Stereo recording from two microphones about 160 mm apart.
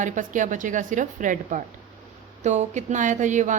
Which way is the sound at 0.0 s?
50° right (ahead or behind).